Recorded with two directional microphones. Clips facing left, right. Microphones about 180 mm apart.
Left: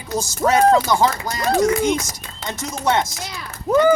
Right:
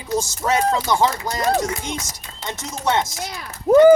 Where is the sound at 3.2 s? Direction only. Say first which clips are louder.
Right 1 dB; 50° right (ahead or behind).